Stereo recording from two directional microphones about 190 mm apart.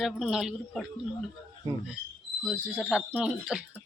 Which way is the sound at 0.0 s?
Centre (ahead or behind).